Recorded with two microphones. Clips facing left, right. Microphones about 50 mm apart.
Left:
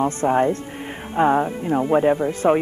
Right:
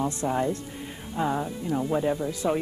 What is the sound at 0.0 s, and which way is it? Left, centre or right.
Speech, left.